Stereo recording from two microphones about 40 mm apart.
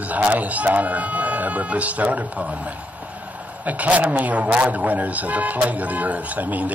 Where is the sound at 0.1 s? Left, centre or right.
Right.